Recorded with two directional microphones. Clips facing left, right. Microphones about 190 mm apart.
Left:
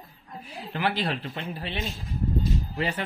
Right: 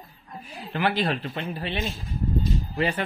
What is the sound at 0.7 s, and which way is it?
Speech, 55° right (ahead or behind).